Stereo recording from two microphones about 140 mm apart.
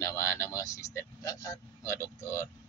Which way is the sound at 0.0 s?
20° left (ahead or behind).